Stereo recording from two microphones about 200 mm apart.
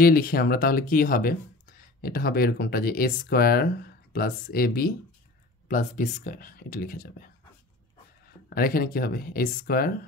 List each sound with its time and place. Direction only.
0.0 s speech: 50° left (ahead or behind)
8.5 s speech: 45° left (ahead or behind)